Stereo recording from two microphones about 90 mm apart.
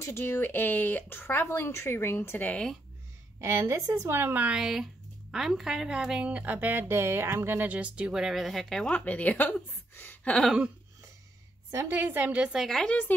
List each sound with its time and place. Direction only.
0.0 s speech: 25° left (ahead or behind)
3.3 s a woman's voice: 30° right (ahead or behind)
4.5 s a woman's voice: 10° right (ahead or behind); by 10.3 s 20° left (ahead or behind)
11.7 s a woman's voice: 30° right (ahead or behind)
12.6 s a woman's voice: 10° left (ahead or behind)